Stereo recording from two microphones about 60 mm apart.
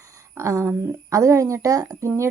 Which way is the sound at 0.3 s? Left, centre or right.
Right.